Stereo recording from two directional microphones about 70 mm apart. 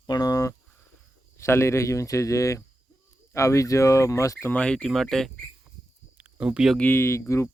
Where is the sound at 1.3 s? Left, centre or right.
Left.